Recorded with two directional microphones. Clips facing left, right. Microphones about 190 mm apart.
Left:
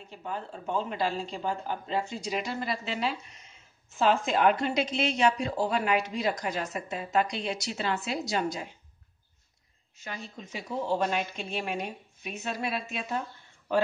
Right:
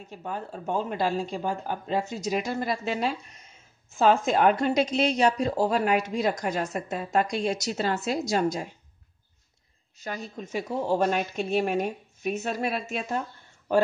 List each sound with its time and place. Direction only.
0.1 s speech: 50° right (ahead or behind)
9.9 s speech: 40° right (ahead or behind)